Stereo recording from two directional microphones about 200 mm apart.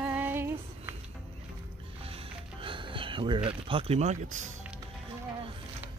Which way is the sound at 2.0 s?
30° right (ahead or behind).